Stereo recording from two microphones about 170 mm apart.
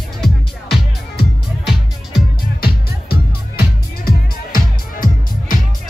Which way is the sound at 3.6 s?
60° left (ahead or behind).